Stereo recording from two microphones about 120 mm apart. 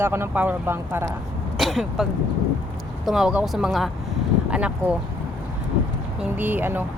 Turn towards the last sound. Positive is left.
turn(degrees=-15)  # may be behind; listen again after turning